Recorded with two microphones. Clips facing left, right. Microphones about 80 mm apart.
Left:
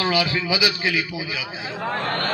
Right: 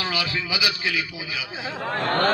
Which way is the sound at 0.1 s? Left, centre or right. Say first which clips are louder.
Left 5 dB; left.